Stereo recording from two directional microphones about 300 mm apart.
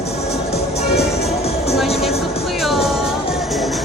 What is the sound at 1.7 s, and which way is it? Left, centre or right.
Music, centre.